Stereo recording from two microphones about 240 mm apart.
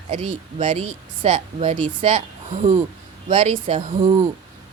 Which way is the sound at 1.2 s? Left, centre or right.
Right.